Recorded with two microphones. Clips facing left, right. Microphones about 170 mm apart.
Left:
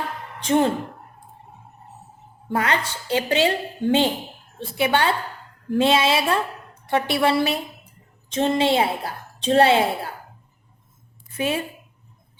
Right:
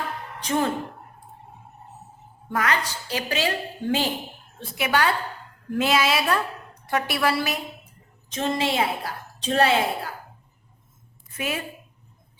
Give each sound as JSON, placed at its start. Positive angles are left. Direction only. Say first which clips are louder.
{"t": 0.4, "sound": "a woman's voice", "louder": "left 5 dB", "side_deg": 25}
{"t": 2.5, "sound": "a woman's voice", "louder": "left 2 dB", "side_deg": 30}
{"t": 11.3, "sound": "a woman's voice", "louder": "left 5 dB", "side_deg": 30}